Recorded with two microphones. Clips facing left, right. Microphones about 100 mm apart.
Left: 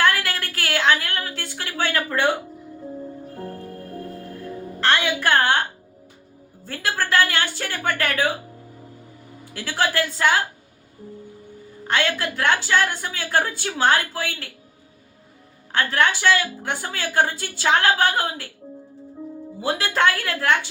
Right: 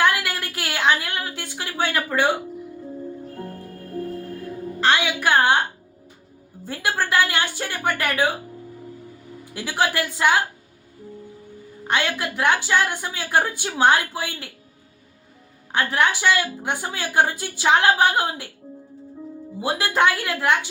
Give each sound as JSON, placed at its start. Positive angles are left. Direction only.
{"t": 0.0, "sound": "a sound", "side_deg": -15}
{"t": 3.3, "sound": "music", "side_deg": 0}
{"t": 4.8, "sound": "a sound", "side_deg": -15}
{"t": 6.7, "sound": "speech", "side_deg": -15}
{"t": 9.5, "sound": "speech", "side_deg": -15}
{"t": 11.9, "sound": "speech", "side_deg": -15}
{"t": 15.7, "sound": "speech", "side_deg": -15}
{"t": 19.5, "sound": "speech", "side_deg": -15}